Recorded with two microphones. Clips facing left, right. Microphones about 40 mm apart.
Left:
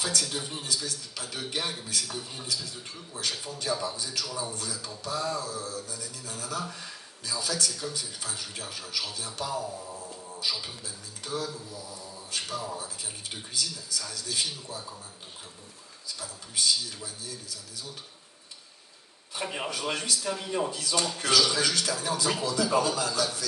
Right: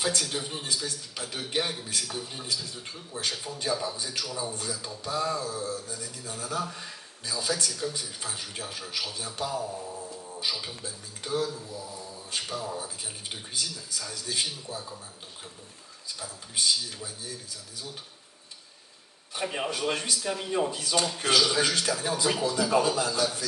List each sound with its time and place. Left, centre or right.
0.0 s speech: right
2.0 s speech: right
3.2 s speech: right
10.8 s speech: right
16.6 s speech: right
19.5 s a man's voice: centre
19.9 s speech: right
20.2 s speech: centre
20.7 s speech: right